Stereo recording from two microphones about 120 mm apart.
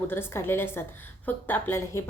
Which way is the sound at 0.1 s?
20° left (ahead or behind).